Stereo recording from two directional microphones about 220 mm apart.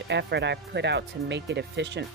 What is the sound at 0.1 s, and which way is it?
Speech, 50° right (ahead or behind).